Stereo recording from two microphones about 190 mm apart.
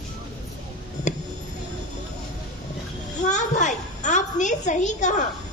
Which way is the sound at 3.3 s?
40° left (ahead or behind).